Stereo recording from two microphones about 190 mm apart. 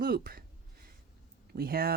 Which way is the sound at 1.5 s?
55° right (ahead or behind).